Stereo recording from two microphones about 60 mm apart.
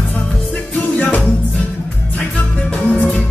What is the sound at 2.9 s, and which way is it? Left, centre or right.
Music, left.